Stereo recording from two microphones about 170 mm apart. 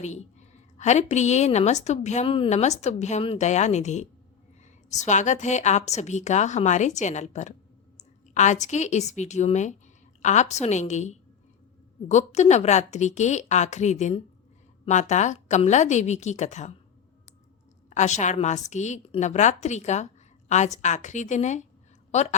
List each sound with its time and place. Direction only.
0.0 s a woman's voice: 40° left (ahead or behind)
17.8 s a woman's voice: 45° left (ahead or behind)